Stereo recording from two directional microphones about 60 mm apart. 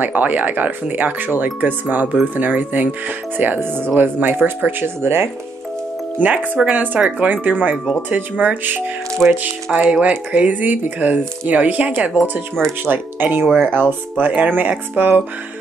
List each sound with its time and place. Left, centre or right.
0.0 s speech: right
6.1 s speech: right
7.7 s speech: centre
8.1 s speech: right
9.2 s speech: centre; by 15.2 s right